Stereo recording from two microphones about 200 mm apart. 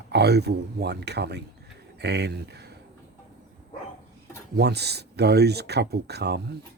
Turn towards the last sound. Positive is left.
turn(degrees=-55)  # may be behind; listen again after turning